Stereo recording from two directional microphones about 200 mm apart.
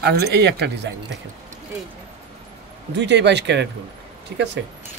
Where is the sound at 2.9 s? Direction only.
60° right (ahead or behind).